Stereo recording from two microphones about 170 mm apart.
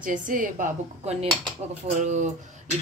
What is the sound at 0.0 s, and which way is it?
A woman's voice, 50° right (ahead or behind).